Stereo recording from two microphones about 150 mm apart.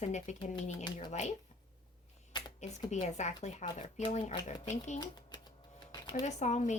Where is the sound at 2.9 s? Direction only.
50° left (ahead or behind).